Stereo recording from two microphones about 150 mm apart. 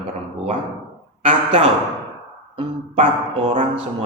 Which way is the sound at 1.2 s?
40° right (ahead or behind).